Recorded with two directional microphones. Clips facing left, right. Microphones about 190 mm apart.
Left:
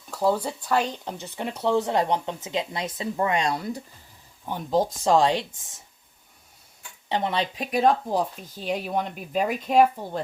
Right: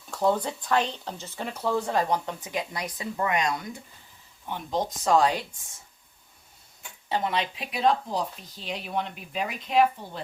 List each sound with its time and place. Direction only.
0.1 s speech: 5° left (ahead or behind); by 4.8 s 40° left (ahead or behind)
5.0 s speech: 25° left (ahead or behind)
7.1 s speech: 30° left (ahead or behind)
7.5 s speech: 45° left (ahead or behind)